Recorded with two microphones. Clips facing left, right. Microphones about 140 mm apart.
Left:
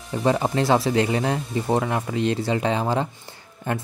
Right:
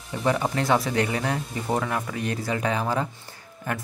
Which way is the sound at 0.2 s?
30° left (ahead or behind).